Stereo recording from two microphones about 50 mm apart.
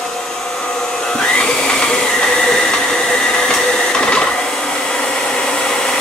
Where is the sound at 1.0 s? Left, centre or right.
Centre.